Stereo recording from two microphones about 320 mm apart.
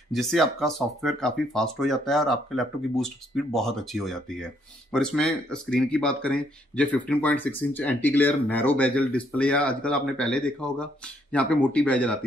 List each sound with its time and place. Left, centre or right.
0.1 s speech: centre